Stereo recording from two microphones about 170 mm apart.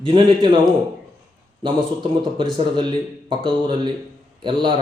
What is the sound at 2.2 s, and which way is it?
A man's voice, 30° right (ahead or behind).